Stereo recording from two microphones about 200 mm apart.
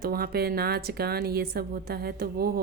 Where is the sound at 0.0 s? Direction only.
50° right (ahead or behind).